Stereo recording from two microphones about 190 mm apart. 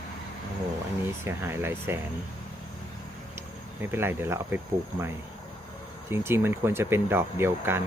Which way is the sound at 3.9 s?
10° right (ahead or behind).